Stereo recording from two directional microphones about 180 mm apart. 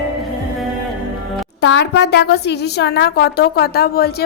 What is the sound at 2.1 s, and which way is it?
A woman's voice, 65° left (ahead or behind).